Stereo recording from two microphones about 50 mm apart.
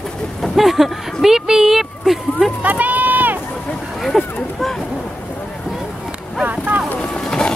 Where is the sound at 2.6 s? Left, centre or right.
Right.